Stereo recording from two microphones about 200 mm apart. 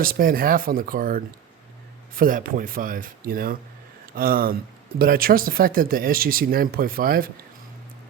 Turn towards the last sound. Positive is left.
turn(degrees=-45)  # may be behind; listen again after turning